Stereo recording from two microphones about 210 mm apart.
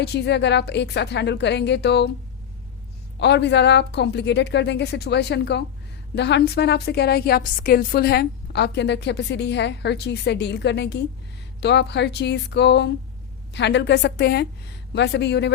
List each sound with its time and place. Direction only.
0.0 s a woman's voice: 55° left (ahead or behind)
3.2 s a woman's voice: 55° left (ahead or behind)